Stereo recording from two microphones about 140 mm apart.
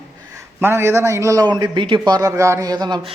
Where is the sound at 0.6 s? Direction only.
15° right (ahead or behind).